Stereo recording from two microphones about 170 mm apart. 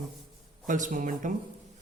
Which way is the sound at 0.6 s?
50° right (ahead or behind).